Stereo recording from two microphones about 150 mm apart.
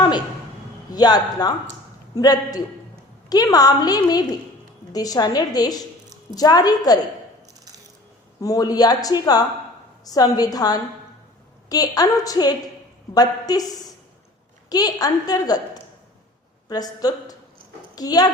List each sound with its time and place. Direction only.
0.9 s a woman's voice: 25° left (ahead or behind)
8.4 s a woman's voice: 25° left (ahead or behind)
14.7 s a woman's voice: 25° left (ahead or behind)